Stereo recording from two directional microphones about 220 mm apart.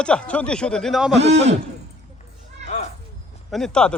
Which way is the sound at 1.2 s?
30° right (ahead or behind).